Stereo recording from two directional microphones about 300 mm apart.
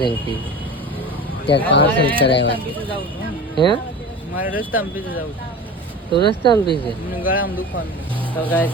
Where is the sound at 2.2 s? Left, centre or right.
Left.